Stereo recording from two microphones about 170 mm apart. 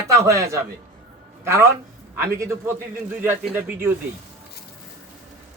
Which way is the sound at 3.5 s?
10° right (ahead or behind).